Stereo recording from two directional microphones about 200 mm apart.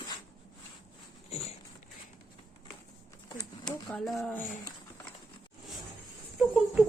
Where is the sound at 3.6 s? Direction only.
Centre (ahead or behind).